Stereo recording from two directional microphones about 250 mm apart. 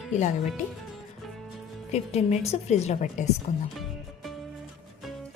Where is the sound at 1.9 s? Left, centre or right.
Left.